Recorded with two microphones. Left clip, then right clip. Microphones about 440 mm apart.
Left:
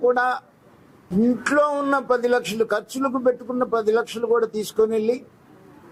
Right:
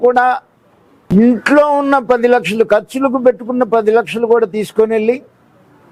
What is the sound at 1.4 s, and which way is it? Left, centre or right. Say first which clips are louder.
Speech: right 9 dB; right.